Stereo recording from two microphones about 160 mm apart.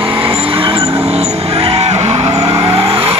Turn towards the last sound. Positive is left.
turn(degrees=-35)  # may be behind; listen again after turning